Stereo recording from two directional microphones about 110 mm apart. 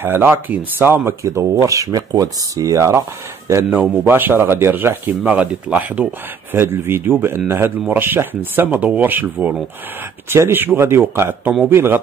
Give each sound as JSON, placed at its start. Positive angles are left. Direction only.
{"t": 0.0, "sound": "speech", "side_deg": -20}
{"t": 4.0, "sound": "speech", "side_deg": -20}